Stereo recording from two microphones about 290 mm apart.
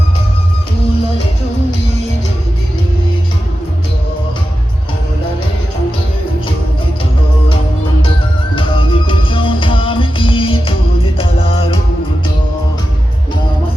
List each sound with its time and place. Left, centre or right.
8.5 s music: centre